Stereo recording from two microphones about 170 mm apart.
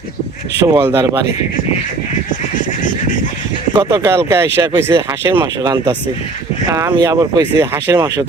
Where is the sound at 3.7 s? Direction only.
25° right (ahead or behind).